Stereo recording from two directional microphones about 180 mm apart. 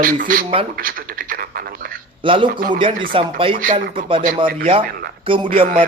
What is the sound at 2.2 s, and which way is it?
Speech, 30° right (ahead or behind).